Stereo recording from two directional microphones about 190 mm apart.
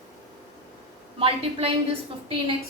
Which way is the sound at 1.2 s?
30° right (ahead or behind).